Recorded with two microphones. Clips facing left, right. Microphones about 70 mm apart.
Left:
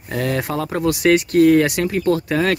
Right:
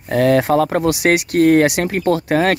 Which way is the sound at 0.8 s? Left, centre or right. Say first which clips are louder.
Even; right.